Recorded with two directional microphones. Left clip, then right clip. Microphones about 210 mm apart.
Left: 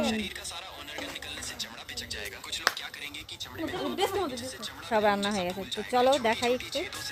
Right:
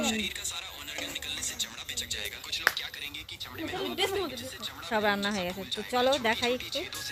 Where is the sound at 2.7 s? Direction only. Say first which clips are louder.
Right 2 dB; 10° right (ahead or behind).